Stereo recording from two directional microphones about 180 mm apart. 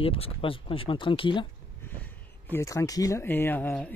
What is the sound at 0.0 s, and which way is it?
Speech, 30° left (ahead or behind).